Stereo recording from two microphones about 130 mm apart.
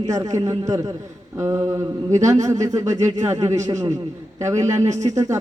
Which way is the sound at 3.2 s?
25° right (ahead or behind).